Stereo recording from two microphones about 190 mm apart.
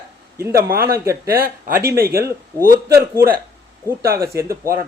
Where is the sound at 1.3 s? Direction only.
50° right (ahead or behind).